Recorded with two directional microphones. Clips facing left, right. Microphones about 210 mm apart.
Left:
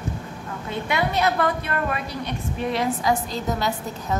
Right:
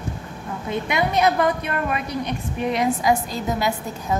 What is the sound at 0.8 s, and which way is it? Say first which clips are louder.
A woman's voice: right 2 dB; 15° right (ahead or behind).